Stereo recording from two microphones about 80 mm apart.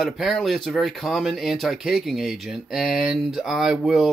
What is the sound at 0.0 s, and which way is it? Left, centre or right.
Speech, centre.